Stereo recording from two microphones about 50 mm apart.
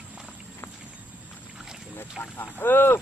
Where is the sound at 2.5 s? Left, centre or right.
Left.